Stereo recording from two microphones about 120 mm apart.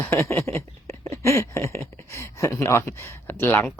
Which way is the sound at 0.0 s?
25° left (ahead or behind).